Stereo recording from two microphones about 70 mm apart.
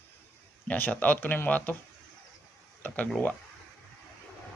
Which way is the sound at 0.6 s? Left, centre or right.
Left.